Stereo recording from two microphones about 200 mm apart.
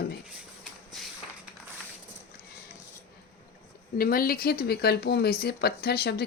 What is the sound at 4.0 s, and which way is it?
Speech, 45° left (ahead or behind).